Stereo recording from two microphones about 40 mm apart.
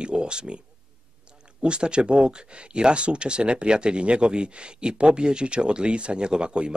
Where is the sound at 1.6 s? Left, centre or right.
Right.